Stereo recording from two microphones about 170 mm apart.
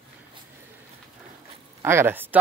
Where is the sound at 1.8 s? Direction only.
15° right (ahead or behind).